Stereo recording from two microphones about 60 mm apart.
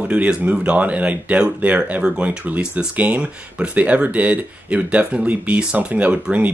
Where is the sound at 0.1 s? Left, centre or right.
Right.